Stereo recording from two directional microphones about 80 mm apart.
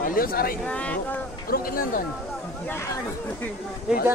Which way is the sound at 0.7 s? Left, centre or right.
Centre.